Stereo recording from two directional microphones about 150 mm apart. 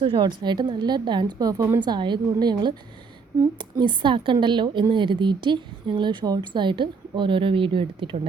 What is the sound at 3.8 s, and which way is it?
A woman's voice, 30° right (ahead or behind).